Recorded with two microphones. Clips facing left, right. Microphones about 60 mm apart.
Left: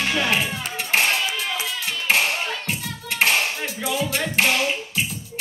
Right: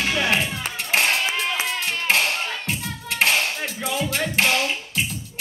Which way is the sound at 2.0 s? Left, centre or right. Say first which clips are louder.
Left 1 dB; centre.